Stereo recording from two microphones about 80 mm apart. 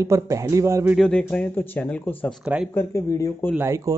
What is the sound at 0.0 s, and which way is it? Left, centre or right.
Speech, right.